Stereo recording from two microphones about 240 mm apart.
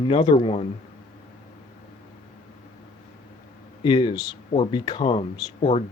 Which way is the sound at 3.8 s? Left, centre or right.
Centre.